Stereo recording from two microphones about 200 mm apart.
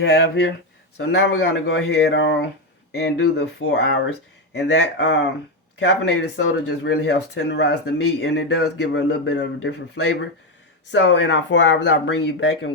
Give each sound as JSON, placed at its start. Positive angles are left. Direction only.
{"t": 0.0, "sound": "speech", "side_deg": 55}